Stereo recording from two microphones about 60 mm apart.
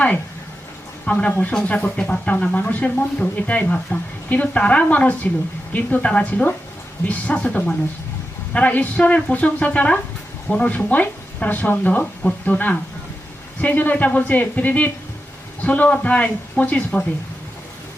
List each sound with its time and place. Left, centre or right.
1.0 s speech: centre